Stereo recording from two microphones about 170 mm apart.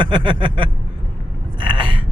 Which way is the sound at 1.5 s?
30° right (ahead or behind).